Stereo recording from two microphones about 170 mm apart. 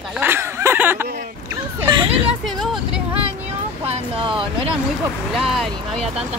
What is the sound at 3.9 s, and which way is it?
Speech, 30° right (ahead or behind).